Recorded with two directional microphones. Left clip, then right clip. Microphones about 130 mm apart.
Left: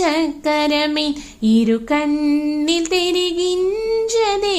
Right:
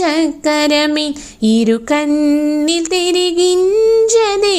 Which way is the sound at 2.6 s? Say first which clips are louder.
Right 3 dB; 35° right (ahead or behind).